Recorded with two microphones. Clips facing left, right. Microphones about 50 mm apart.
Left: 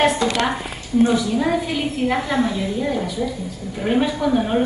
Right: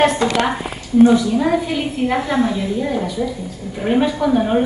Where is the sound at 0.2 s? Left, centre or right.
Right.